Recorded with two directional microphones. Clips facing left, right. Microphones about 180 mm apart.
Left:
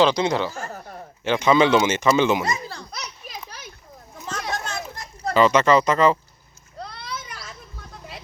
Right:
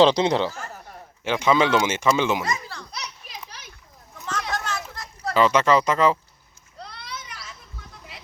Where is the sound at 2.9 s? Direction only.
45° left (ahead or behind).